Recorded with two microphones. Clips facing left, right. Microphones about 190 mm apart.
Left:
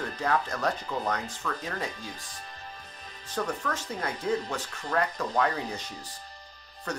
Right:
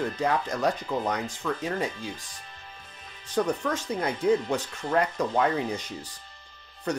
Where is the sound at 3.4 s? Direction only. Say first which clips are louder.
Right 5 dB; 20° right (ahead or behind).